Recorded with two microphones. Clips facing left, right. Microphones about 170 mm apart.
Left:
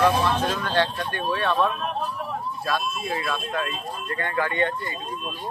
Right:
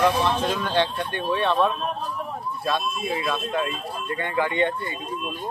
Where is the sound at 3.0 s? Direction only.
20° right (ahead or behind).